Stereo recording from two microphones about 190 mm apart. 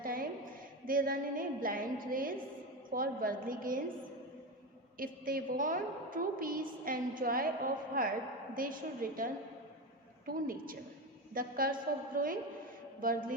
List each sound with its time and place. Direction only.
0.0 s a sound: 50° right (ahead or behind)
0.9 s a woman's voice: 50° right (ahead or behind)
4.9 s a woman's voice: 50° right (ahead or behind)